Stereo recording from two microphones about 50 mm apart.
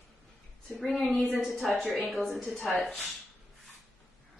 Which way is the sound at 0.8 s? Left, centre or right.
Centre.